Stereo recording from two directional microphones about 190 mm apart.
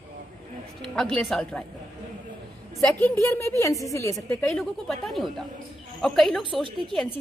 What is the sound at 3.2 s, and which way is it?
A woman's voice, 15° left (ahead or behind).